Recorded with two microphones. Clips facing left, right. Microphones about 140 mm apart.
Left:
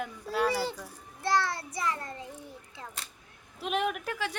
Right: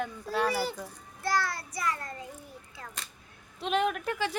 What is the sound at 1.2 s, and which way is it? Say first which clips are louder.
A child's voice: left 2 dB; 25° left (ahead or behind).